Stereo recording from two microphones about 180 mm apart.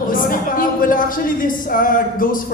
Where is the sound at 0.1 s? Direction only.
50° left (ahead or behind).